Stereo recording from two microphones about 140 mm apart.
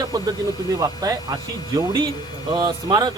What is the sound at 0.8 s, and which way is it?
Speech, 25° right (ahead or behind).